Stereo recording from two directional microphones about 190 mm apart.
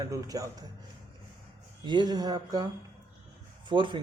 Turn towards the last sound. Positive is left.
turn(degrees=-25)  # may be behind; listen again after turning